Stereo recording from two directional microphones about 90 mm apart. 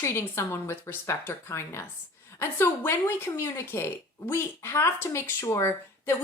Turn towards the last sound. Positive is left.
turn(degrees=30)  # may be behind; listen again after turning